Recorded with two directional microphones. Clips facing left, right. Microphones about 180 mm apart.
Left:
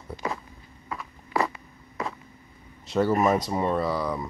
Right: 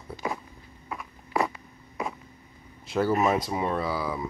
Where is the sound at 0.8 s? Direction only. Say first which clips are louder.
Left 1 dB; 15° right (ahead or behind).